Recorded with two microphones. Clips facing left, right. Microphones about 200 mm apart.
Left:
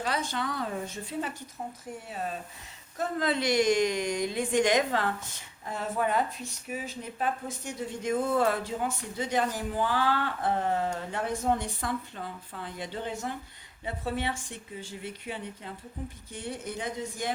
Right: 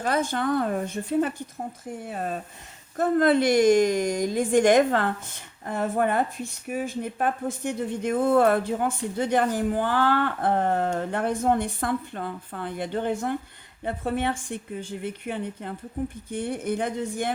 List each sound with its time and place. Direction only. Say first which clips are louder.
0.0 s a woman's voice: right 6 dB; 50° right (ahead or behind)